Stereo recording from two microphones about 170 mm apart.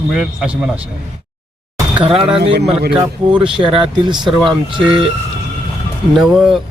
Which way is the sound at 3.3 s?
30° right (ahead or behind).